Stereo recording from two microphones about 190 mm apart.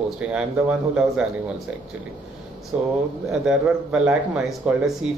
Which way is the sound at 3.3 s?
5° right (ahead or behind).